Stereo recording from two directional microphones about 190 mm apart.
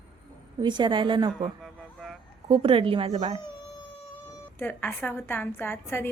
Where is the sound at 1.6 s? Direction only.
Centre (ahead or behind).